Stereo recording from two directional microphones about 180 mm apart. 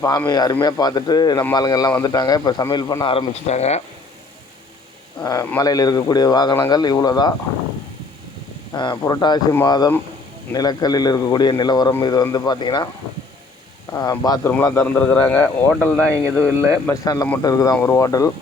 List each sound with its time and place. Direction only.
0.3 s a man's voice: 20° left (ahead or behind); by 3.8 s 40° left (ahead or behind)
5.2 s a man's voice: 20° left (ahead or behind)
8.7 s a man's voice: 25° left (ahead or behind)
13.9 s a man's voice: 20° left (ahead or behind)
14.8 s speech: 10° left (ahead or behind)
16.9 s a man's voice: 20° left (ahead or behind)